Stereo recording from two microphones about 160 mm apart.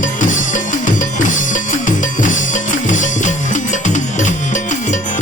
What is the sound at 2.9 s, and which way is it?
Music, 50° left (ahead or behind).